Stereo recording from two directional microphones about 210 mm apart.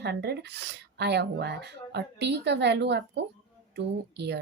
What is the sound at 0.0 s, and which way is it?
A woman's voice, 50° right (ahead or behind).